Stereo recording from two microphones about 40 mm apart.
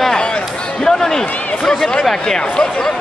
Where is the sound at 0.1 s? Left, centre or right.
Left.